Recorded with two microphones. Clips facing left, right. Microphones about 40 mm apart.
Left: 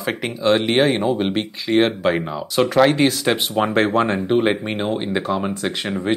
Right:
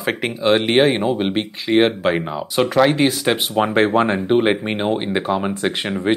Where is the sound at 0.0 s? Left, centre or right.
Centre.